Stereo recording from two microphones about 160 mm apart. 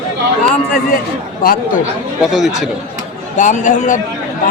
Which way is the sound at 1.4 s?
65° left (ahead or behind).